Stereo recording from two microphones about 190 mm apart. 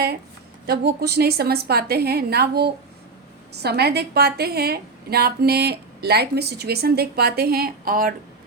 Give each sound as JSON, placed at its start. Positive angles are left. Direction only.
{"t": 0.7, "sound": "a woman's voice", "side_deg": -55}